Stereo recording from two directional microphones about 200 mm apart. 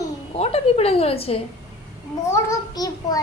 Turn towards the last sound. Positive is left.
turn(degrees=20)  # may be behind; listen again after turning